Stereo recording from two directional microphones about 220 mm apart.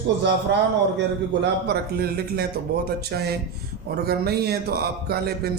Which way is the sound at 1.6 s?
45° right (ahead or behind).